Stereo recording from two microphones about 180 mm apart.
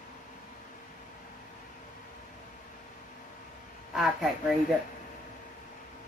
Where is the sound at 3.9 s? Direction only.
Centre (ahead or behind).